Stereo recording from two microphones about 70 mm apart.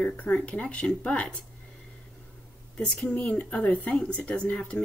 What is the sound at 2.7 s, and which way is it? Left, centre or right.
Speech, centre.